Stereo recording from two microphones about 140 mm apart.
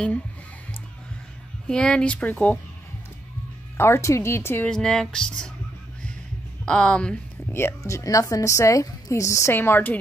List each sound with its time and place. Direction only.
1.7 s speech: 5° left (ahead or behind)
3.7 s speech: 15° left (ahead or behind)
4.6 s speech: 5° left (ahead or behind)
6.6 s a woman's voice: 5° left (ahead or behind)